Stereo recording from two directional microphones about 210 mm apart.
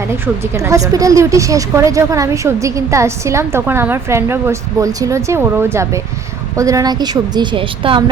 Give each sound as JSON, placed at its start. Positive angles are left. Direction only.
{"t": 0.1, "sound": "a woman's voice", "side_deg": -15}